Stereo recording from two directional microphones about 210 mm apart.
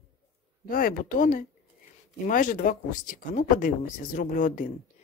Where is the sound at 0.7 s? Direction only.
40° left (ahead or behind).